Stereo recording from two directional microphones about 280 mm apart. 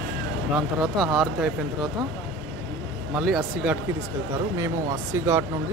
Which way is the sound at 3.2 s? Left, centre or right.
Centre.